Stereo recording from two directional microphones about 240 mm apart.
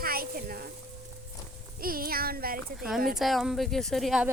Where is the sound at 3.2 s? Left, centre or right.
Centre.